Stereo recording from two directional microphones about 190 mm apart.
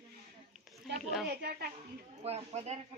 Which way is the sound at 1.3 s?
55° right (ahead or behind).